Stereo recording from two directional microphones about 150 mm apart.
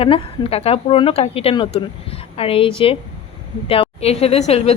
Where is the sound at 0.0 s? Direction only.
40° left (ahead or behind).